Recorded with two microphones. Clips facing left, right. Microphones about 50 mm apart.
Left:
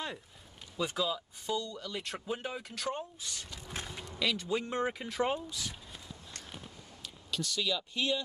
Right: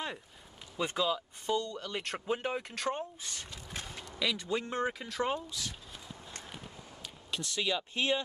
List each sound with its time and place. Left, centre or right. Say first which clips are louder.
0.7 s speech: right 2 dB; right
2.4 s speech: right 3 dB; right
3.6 s a sound: left 3 dB; centre
4.2 s speech: left 1 dB; centre
4.5 s speech: even; centre
5.3 s speech: even; centre
7.2 s speech: even; right